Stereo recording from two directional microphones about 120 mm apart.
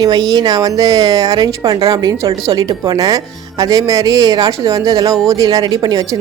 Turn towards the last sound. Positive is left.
turn(degrees=-30)  # may be behind; listen again after turning